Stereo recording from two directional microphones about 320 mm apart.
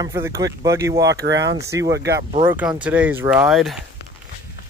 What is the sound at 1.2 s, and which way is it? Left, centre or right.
Speech, right.